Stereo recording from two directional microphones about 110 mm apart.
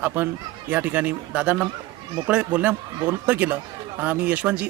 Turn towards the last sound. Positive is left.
turn(degrees=-15)  # may be behind; listen again after turning